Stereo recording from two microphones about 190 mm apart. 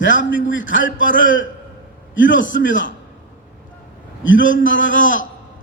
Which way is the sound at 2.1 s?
75° left (ahead or behind).